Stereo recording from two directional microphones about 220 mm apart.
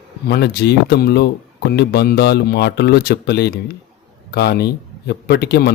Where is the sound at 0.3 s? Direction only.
50° left (ahead or behind).